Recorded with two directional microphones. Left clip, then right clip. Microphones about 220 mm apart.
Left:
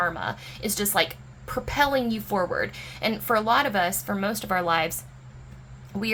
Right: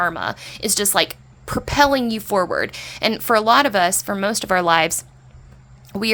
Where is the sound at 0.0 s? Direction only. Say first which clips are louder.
Right 5 dB; 40° right (ahead or behind).